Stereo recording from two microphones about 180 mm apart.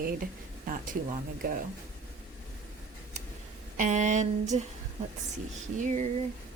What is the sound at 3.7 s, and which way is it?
Speech, 45° right (ahead or behind).